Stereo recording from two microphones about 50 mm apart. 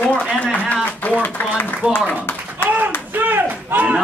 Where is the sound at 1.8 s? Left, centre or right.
Right.